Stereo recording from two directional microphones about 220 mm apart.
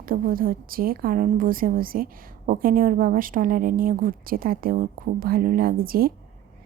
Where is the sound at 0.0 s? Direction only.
40° right (ahead or behind).